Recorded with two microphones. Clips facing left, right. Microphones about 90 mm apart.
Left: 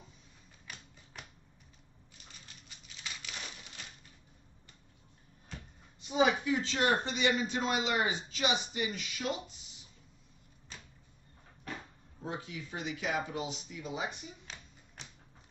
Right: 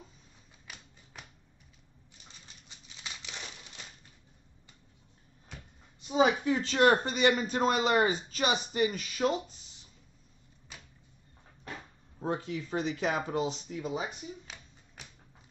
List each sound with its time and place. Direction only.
6.0 s a sound: 35° right (ahead or behind)
6.6 s speech: 55° right (ahead or behind)
12.2 s speech: 45° right (ahead or behind)